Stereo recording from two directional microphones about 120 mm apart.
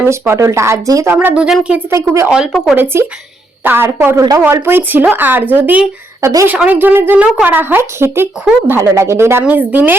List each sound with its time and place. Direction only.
0.0 s speech: 25° right (ahead or behind)
1.1 s speech: 15° right (ahead or behind)
1.9 s speech: 25° right (ahead or behind)
2.3 s speech: 5° right (ahead or behind)
2.7 s speech: 20° right (ahead or behind)
6.5 s speech: 15° right (ahead or behind)